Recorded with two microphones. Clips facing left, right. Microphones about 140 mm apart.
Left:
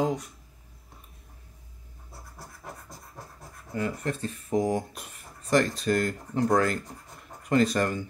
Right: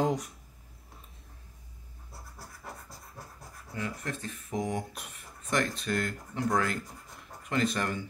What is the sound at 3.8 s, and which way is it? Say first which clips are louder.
Speech: left 6 dB; 35° left (ahead or behind).